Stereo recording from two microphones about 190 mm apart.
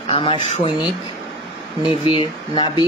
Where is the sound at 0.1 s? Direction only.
30° left (ahead or behind).